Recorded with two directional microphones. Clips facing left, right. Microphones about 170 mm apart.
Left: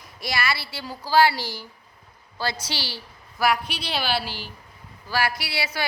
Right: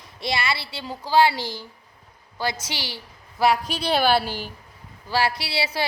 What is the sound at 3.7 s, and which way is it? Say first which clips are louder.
Speech: right 7 dB; 50° right (ahead or behind).